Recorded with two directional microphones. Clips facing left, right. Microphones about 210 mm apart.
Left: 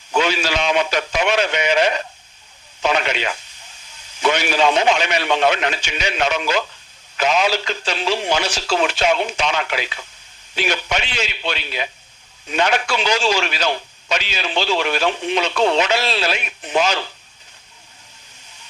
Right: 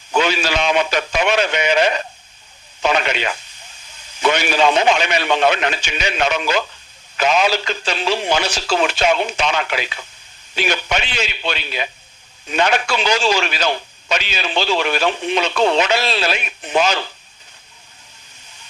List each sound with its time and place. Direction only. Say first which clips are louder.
0.1 s speech: right 1 dB; 60° right (ahead or behind)